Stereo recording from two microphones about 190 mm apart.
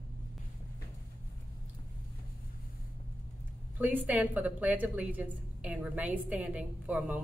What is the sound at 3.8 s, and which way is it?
A woman's voice, 10° right (ahead or behind).